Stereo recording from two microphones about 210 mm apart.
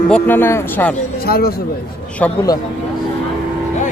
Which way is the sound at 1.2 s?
45° left (ahead or behind).